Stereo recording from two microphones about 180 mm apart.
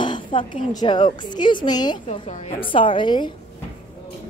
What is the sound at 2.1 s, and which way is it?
A woman's voice, 40° left (ahead or behind).